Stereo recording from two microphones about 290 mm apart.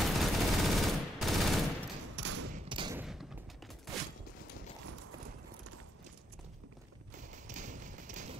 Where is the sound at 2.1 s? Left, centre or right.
Right.